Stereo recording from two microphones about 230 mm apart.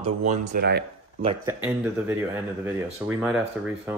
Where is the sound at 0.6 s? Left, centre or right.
Right.